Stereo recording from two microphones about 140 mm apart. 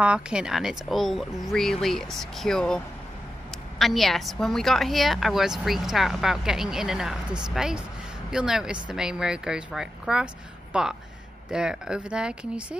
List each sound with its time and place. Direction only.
0.0 s a woman's voice: 5° right (ahead or behind)